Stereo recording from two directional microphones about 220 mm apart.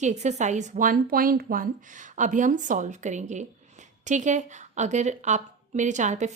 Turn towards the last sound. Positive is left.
turn(degrees=-35)  # may be behind; listen again after turning